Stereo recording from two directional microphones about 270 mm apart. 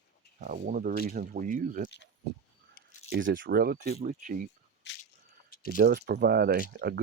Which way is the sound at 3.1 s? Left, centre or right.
Right.